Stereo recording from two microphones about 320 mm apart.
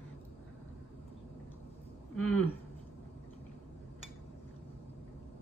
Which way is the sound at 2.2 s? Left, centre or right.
Left.